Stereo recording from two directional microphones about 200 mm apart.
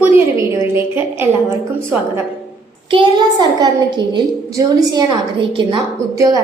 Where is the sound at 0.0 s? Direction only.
10° right (ahead or behind).